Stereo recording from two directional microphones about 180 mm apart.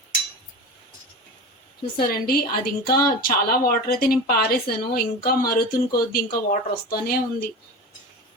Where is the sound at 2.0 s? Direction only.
55° left (ahead or behind).